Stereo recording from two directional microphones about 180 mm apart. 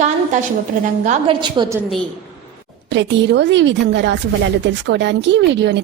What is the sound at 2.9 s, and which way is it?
A woman's voice, 85° right.